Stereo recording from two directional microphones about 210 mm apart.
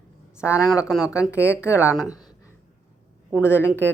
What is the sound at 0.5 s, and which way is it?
Speech, 15° left (ahead or behind).